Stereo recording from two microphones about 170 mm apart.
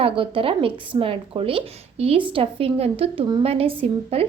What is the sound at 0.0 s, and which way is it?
A woman's voice, 30° right (ahead or behind).